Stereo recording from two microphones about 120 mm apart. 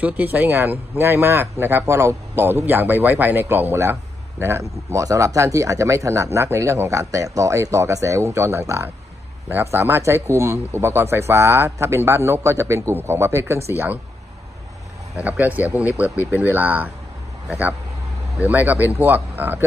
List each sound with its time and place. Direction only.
0.0 s speech: 15° right (ahead or behind)
15.1 s speech: 15° right (ahead or behind)